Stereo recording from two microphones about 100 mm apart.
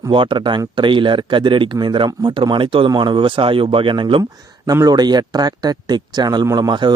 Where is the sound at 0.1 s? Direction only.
55° right (ahead or behind).